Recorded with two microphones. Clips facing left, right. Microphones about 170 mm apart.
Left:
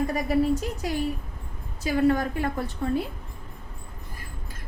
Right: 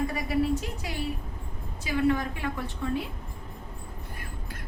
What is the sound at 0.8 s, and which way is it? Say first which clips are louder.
A woman's voice: left 5 dB; 40° left (ahead or behind).